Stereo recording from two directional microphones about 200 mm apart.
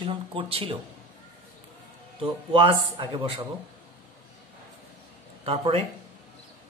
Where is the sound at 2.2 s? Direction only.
25° right (ahead or behind).